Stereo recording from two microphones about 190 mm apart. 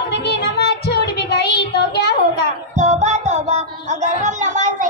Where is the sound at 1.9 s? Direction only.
60° left (ahead or behind).